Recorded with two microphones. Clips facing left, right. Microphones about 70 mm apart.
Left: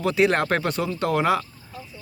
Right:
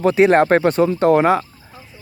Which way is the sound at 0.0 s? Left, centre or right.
Right.